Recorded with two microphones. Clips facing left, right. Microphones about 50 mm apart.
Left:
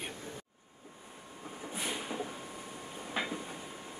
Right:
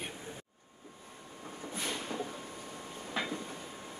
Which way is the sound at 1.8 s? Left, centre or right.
Centre.